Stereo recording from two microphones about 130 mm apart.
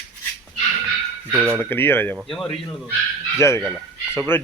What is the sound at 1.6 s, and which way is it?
Speech, 15° left (ahead or behind).